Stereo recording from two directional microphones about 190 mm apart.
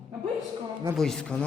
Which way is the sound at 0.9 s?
Centre (ahead or behind).